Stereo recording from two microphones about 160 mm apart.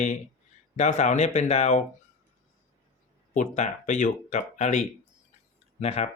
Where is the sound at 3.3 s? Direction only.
50° left (ahead or behind).